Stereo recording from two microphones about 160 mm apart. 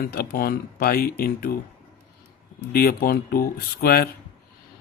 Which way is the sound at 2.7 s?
70° left (ahead or behind).